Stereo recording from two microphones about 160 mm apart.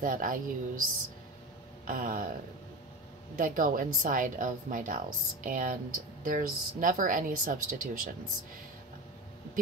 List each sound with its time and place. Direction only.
0.0 s a woman's voice: 60° right (ahead or behind)
1.9 s a woman's voice: 60° right (ahead or behind)
3.3 s a woman's voice: 55° right (ahead or behind)